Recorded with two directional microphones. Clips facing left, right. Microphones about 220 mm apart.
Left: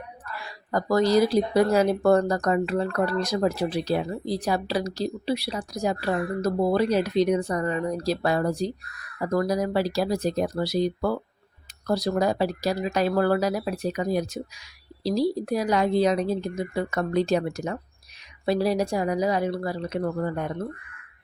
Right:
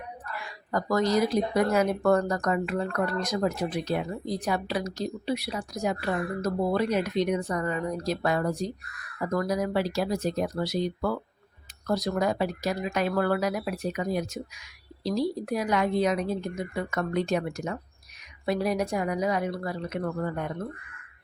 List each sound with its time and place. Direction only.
0.3 s speech: 35° left (ahead or behind)